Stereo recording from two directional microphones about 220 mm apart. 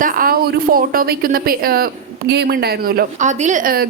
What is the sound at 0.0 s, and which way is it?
Speech, 40° right (ahead or behind).